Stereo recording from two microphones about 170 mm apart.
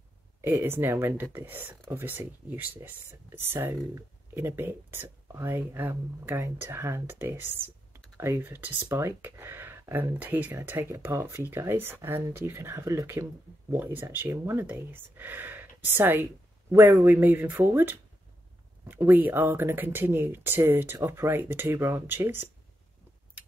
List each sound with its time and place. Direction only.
0.4 s speech: 15° right (ahead or behind)